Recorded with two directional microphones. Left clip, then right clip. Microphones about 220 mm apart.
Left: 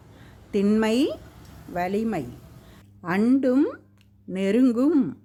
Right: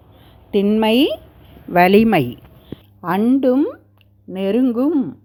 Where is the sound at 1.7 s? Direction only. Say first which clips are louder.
Right 14 dB; 40° right (ahead or behind).